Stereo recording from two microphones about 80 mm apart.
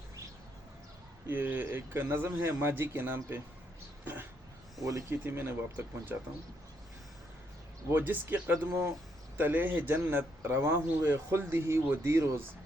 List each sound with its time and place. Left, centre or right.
1.3 s a man's voice: right
4.0 s throat clearing: right
4.8 s speech: right
5.0 s a man's voice: right
7.9 s a man's voice: right